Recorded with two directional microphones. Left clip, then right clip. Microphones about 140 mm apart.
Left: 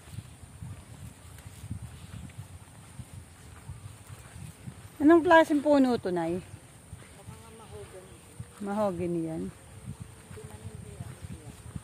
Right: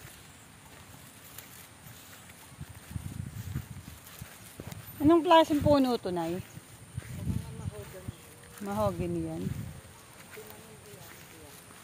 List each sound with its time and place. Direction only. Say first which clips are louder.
5.0 s speech: left 2 dB; 45° left (ahead or behind)
8.6 s speech: left 1 dB; 45° left (ahead or behind)